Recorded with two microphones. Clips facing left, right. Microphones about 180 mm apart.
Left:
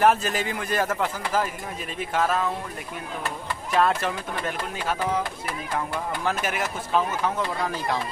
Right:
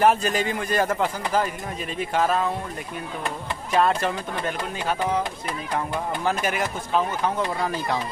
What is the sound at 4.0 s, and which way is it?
Speech, centre (ahead or behind).